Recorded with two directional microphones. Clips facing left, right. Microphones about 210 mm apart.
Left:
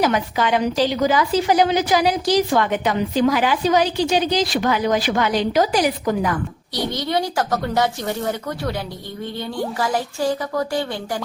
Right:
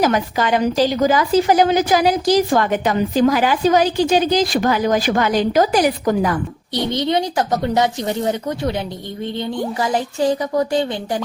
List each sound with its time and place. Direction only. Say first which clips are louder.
0.0 s a woman's voice: right 2 dB; 45° right (ahead or behind)
6.9 s a woman's voice: right 4 dB; 20° right (ahead or behind)